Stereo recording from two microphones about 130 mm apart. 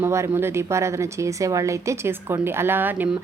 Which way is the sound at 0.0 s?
20° right (ahead or behind).